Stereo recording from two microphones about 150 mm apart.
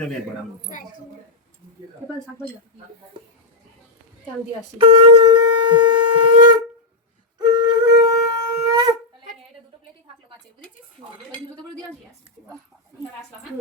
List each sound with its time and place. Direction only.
4.8 s shofar: 35° right (ahead or behind)
7.5 s wind instrument: 30° right (ahead or behind)
7.9 s shofar: 25° right (ahead or behind)